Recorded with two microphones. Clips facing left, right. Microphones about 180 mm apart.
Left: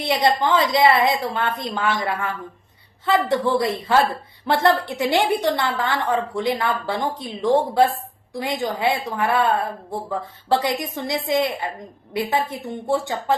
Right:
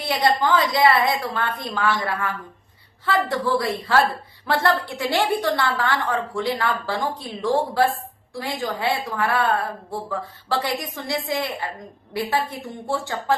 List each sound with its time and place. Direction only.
0.0 s a woman's voice: 20° left (ahead or behind)